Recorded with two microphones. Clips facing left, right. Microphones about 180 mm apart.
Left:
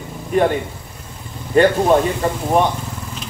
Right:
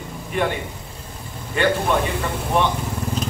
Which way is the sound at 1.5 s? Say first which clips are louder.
Left 7 dB; 40° left (ahead or behind).